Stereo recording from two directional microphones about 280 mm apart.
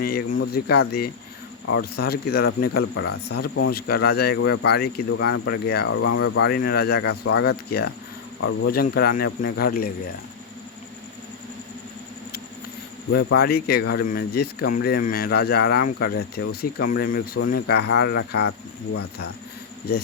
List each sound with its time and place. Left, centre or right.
0.0 s speech: left
8.4 s speech: left
8.7 s speech: left
13.1 s speech: left